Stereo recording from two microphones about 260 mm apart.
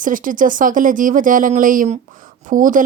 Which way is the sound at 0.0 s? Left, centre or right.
Right.